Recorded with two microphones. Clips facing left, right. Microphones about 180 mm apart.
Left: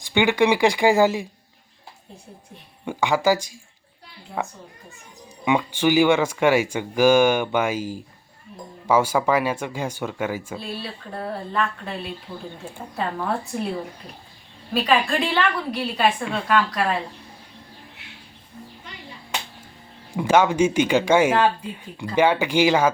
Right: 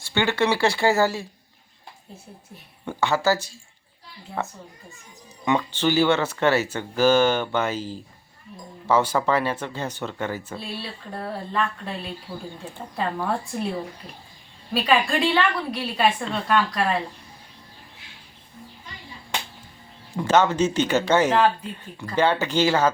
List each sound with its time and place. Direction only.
0.0 s speech: 15° left (ahead or behind)
2.8 s a woman's voice: 15° left (ahead or behind)
14.7 s a woman's voice: centre (ahead or behind)
20.1 s speech: 10° left (ahead or behind)